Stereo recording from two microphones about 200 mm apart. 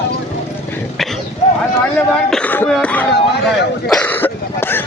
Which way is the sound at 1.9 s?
5° left (ahead or behind).